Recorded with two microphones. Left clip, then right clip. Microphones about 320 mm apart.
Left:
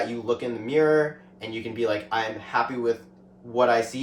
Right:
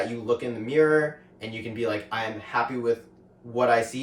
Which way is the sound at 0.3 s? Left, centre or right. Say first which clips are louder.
Right 2 dB; centre.